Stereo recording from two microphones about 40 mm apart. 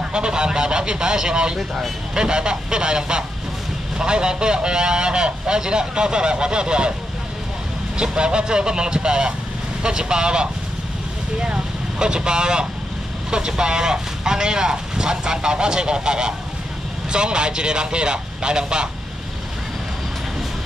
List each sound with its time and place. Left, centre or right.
0.0 s speech: right
8.0 s speech: right